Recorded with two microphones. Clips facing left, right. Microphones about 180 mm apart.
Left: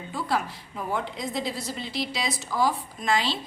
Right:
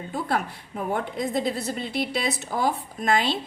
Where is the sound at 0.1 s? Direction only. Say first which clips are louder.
Right 1 dB; 55° right (ahead or behind).